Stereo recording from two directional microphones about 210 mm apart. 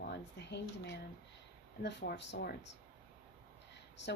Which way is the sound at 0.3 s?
55° left (ahead or behind).